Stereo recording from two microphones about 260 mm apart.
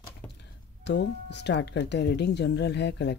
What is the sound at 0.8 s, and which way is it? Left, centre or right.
Speech, left.